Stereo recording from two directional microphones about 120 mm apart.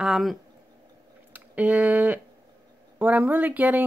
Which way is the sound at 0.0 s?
Centre (ahead or behind).